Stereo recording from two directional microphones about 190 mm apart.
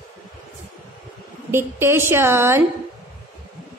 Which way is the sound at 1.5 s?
10° right (ahead or behind).